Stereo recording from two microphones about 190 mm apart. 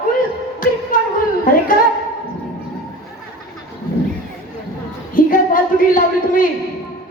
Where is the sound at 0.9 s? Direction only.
45° left (ahead or behind).